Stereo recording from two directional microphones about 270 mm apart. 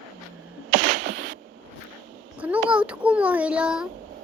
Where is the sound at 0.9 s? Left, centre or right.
Right.